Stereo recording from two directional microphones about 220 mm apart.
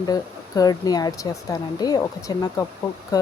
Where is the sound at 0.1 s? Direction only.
15° left (ahead or behind).